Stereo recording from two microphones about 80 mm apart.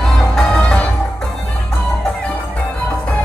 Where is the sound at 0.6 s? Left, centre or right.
Centre.